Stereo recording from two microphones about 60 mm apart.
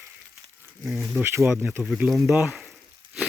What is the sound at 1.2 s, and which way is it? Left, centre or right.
Speech, right.